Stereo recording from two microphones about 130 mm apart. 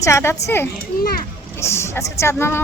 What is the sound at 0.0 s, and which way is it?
Speech, 20° left (ahead or behind).